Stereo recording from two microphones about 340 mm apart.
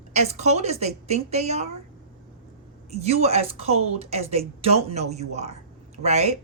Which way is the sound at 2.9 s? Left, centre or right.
Centre.